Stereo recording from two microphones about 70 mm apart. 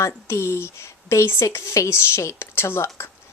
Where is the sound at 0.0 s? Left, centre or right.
Left.